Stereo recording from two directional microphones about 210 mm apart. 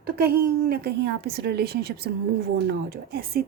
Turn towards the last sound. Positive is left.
turn(degrees=-45)  # may be behind; listen again after turning